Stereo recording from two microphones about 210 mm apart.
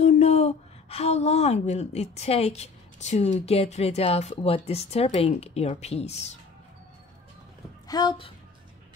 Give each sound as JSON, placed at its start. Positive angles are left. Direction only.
{"t": 0.0, "sound": "a woman's voice", "side_deg": 30}
{"t": 7.9, "sound": "speech", "side_deg": 20}